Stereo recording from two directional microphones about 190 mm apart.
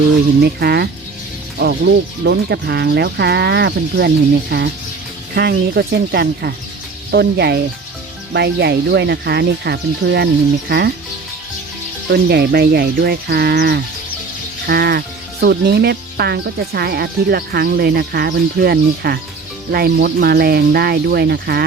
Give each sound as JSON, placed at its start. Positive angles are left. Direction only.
{"t": 0.4, "sound": "speech", "side_deg": -60}
{"t": 12.1, "sound": "speech", "side_deg": -55}